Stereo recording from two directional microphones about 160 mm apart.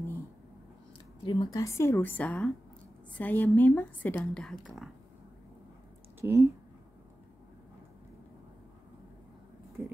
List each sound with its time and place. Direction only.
1.2 s a woman's voice: 25° left (ahead or behind); by 4.6 s 5° left (ahead or behind)
6.2 s speech: 15° right (ahead or behind)
9.8 s speech: 15° right (ahead or behind)